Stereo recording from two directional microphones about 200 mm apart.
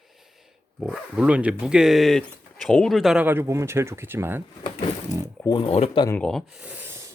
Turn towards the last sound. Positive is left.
turn(degrees=-10)  # may be behind; listen again after turning